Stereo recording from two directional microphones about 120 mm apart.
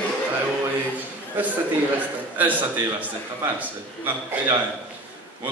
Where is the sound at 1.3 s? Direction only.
15° right (ahead or behind).